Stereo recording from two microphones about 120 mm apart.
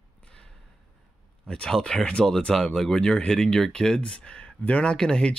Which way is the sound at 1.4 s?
10° left (ahead or behind).